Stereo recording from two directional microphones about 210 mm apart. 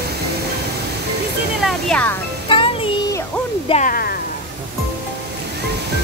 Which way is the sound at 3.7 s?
40° left (ahead or behind).